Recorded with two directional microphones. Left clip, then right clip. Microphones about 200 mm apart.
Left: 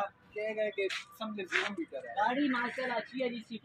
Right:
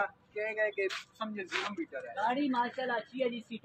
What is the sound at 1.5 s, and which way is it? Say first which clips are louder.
Speech: left 4 dB; 5° left (ahead or behind).